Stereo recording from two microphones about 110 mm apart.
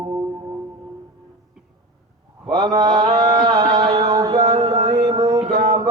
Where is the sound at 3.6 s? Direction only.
35° right (ahead or behind).